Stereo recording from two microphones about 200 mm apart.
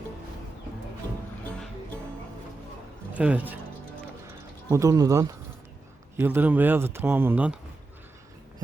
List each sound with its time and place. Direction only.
3.2 s speech: 5° right (ahead or behind)
4.7 s speech: 15° right (ahead or behind)